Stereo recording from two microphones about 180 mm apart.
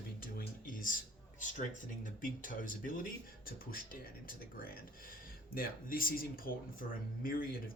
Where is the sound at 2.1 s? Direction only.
50° left (ahead or behind).